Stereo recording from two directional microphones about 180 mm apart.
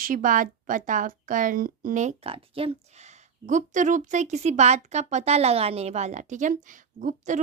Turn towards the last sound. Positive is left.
turn(degrees=-45)  # may be behind; listen again after turning